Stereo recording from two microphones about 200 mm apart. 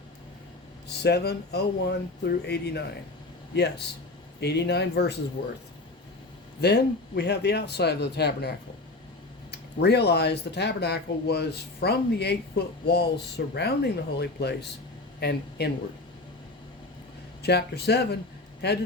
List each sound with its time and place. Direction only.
0.9 s speech: 55° left (ahead or behind)
6.6 s speech: 55° left (ahead or behind)
17.4 s speech: 55° left (ahead or behind)